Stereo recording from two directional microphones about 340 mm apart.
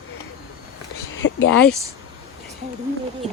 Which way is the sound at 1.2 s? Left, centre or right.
Left.